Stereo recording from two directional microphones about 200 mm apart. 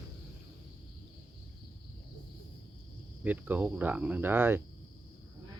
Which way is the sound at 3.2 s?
10° right (ahead or behind).